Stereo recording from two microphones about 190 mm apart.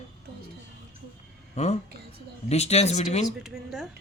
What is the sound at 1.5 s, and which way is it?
Speech, 35° left (ahead or behind).